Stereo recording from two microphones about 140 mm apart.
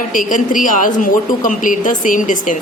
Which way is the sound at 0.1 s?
70° left (ahead or behind).